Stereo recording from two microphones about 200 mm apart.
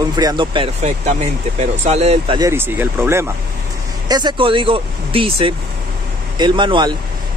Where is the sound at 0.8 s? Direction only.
35° right (ahead or behind).